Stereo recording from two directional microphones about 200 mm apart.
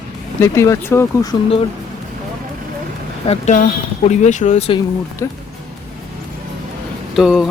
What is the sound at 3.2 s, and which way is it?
Speech, 35° left (ahead or behind).